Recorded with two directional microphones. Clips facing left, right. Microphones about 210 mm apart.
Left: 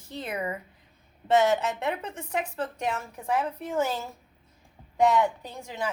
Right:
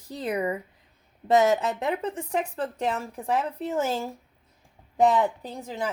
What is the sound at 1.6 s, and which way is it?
A woman's voice, 35° right (ahead or behind).